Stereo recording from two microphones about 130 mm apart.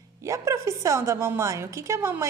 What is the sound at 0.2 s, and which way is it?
A woman's voice, 20° right (ahead or behind).